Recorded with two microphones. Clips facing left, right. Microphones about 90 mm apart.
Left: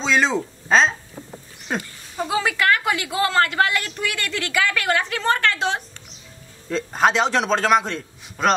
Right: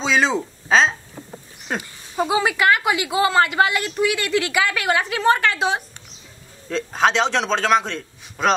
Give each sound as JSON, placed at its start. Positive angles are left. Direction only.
{"t": 0.0, "sound": "a woman's voice", "side_deg": -5}
{"t": 6.7, "sound": "a man's voice", "side_deg": 5}